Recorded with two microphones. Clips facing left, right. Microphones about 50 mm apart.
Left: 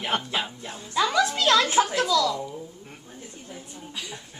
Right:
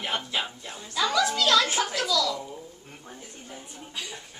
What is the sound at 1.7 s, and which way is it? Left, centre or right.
Speech, left.